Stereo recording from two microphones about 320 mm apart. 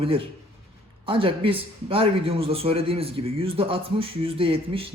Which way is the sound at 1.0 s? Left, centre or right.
Centre.